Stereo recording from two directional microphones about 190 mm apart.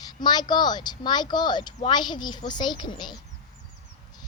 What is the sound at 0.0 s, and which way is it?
A woman's voice, 20° left (ahead or behind).